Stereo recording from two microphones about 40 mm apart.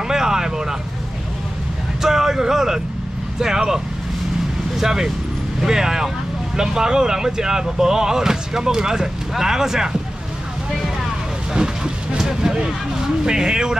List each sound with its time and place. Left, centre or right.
0.1 s vehicle: centre
2.0 s speech: centre
11.5 s vehicle: centre
12.6 s speech: centre